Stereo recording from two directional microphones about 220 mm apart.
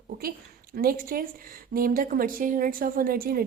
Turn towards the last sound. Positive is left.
turn(degrees=-40)  # may be behind; listen again after turning